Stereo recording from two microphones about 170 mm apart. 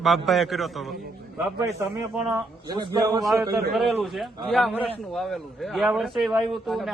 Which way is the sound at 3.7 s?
Centre (ahead or behind).